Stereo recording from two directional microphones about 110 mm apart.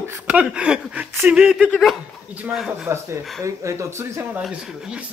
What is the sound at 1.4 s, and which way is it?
Speech, 10° right (ahead or behind).